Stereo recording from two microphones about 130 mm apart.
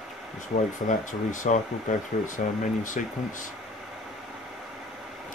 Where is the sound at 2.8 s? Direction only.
90° left.